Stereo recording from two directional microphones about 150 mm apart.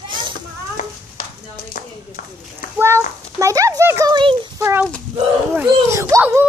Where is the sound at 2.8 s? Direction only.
20° right (ahead or behind).